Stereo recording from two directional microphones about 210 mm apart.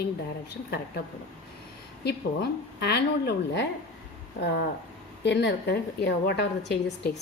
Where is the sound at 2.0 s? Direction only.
50° left (ahead or behind).